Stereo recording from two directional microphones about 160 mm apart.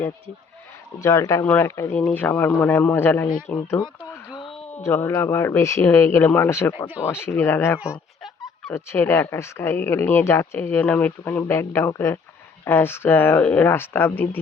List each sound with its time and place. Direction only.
0.9 s speech: 20° left (ahead or behind)
3.2 s speech: 60° left (ahead or behind)
4.3 s a sound: 30° left (ahead or behind)
4.7 s speech: 15° left (ahead or behind)
7.8 s a sound: 5° right (ahead or behind)
8.7 s speech: 15° left (ahead or behind)